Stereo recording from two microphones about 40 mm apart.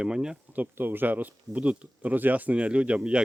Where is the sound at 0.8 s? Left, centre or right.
Right.